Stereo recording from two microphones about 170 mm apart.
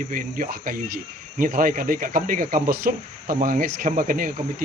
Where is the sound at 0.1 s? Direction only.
55° right (ahead or behind).